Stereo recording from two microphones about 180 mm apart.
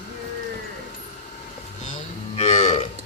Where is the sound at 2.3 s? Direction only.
40° left (ahead or behind).